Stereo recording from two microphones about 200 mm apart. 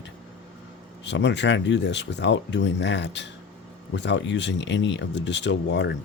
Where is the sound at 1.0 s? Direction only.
60° left (ahead or behind).